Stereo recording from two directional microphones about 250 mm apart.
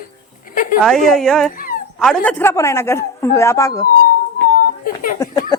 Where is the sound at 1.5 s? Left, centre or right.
Left.